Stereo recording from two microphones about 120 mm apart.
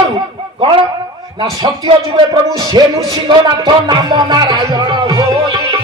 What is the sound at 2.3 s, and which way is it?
Music, 35° right (ahead or behind).